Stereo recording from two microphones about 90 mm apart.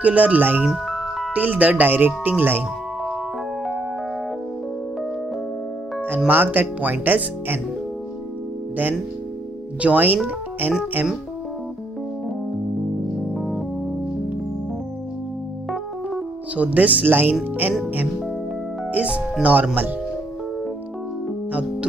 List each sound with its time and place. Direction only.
0.0 s speech: 15° right (ahead or behind)
0.7 s music: centre (ahead or behind)
1.3 s speech: 15° right (ahead or behind)
6.0 s speech: 20° right (ahead or behind)
9.8 s speech: 15° right (ahead or behind)
13.3 s music: 5° right (ahead or behind)
16.5 s speech: 15° right (ahead or behind)
18.9 s speech: 15° right (ahead or behind)